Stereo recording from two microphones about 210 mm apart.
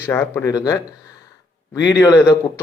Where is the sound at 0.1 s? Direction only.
10° left (ahead or behind).